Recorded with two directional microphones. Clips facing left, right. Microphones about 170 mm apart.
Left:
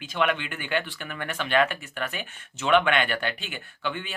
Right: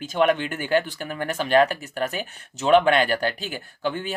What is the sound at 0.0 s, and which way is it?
Speech, 40° right (ahead or behind).